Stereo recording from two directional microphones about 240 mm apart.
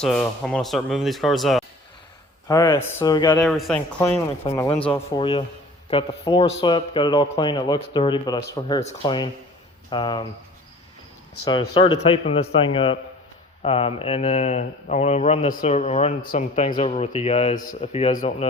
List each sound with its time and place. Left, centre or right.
0.0 s speech: centre
2.5 s speech: centre
3.3 s speech: centre
11.4 s speech: centre